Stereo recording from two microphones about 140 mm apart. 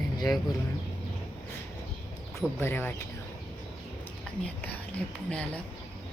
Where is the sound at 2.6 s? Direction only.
15° left (ahead or behind).